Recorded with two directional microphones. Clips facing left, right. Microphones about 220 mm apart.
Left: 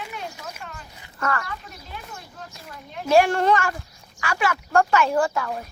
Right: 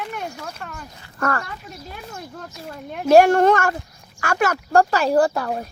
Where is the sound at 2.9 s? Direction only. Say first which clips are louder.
Right 5 dB; 50° right (ahead or behind).